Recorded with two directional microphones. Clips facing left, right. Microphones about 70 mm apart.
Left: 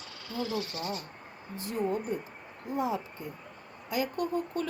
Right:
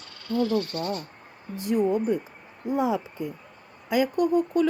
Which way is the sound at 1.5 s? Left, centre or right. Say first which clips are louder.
Right 8 dB; right.